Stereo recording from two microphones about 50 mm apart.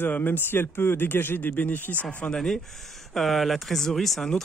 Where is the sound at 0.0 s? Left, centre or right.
Left.